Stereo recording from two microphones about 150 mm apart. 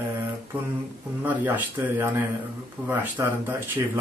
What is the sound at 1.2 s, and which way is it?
Speech, 10° right (ahead or behind).